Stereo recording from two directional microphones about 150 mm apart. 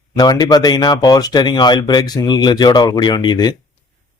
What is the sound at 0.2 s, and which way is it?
A man's voice, 25° left (ahead or behind).